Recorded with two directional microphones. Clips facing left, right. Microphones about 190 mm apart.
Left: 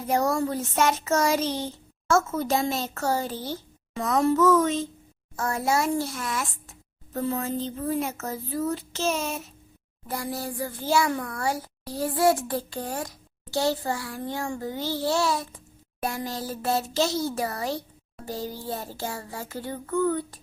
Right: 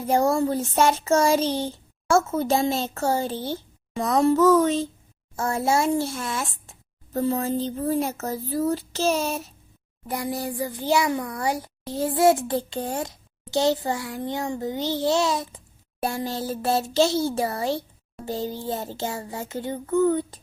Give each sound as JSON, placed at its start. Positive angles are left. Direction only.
{"t": 0.1, "sound": "a child's voice", "side_deg": -25}
{"t": 10.1, "sound": "a child's voice", "side_deg": -15}